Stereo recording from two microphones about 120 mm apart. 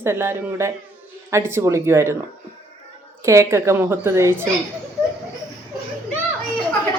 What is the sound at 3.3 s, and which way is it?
Speech, 25° right (ahead or behind).